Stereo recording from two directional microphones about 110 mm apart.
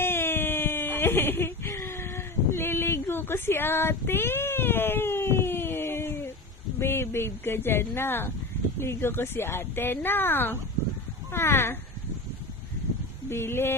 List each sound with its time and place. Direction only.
0.0 s baby cry: 20° left (ahead or behind)
6.7 s speech: 20° left (ahead or behind)
13.3 s speech: 20° left (ahead or behind)